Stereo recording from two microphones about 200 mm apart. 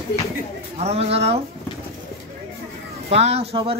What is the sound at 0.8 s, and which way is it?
Speech, 30° right (ahead or behind).